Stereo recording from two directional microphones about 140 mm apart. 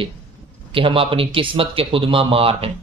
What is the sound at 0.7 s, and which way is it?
Speech, 40° right (ahead or behind).